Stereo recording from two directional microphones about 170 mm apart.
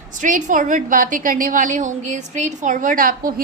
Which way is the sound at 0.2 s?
50° right (ahead or behind).